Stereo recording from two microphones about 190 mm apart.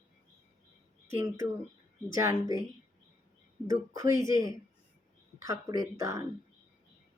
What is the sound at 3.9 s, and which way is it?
Speech, 15° right (ahead or behind).